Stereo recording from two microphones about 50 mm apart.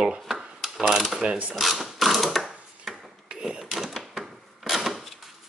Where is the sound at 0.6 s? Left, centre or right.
Centre; by 1.5 s right.